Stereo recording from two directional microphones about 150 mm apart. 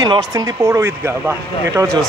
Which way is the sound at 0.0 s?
25° right (ahead or behind).